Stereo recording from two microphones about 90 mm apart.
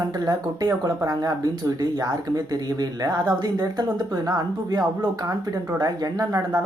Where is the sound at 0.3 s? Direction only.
45° right (ahead or behind).